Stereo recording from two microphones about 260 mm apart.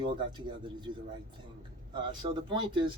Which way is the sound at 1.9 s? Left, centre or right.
Centre.